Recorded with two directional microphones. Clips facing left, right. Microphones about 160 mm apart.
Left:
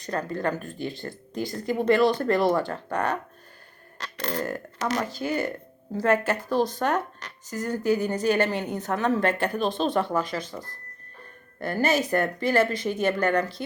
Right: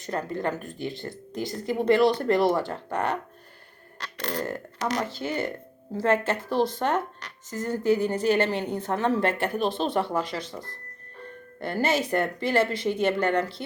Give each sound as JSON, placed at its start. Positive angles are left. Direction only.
{"t": 0.0, "sound": "a woman's voice", "side_deg": -20}
{"t": 4.0, "sound": "a sound", "side_deg": 45}
{"t": 4.9, "sound": "a woman's voice", "side_deg": -25}